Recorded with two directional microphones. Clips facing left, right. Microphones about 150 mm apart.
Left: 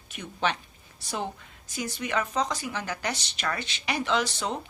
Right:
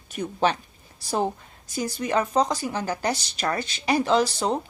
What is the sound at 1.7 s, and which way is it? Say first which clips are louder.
A woman's voice: right 5 dB; 35° right (ahead or behind).